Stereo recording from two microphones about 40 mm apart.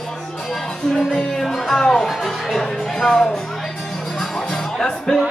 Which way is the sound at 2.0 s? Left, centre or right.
Centre.